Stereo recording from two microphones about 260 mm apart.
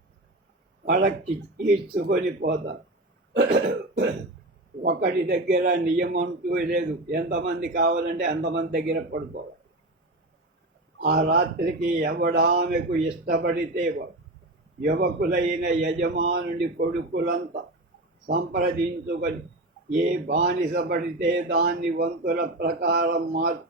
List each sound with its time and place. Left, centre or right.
0.9 s a man's voice: right
3.3 s cough: right
4.8 s a man's voice: right
11.0 s a man's voice: right